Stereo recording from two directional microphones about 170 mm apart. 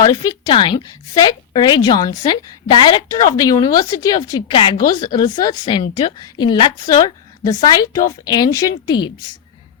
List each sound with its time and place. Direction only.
0.0 s a woman's voice: 20° left (ahead or behind)